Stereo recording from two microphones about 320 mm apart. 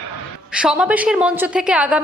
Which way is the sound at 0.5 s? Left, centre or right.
Centre.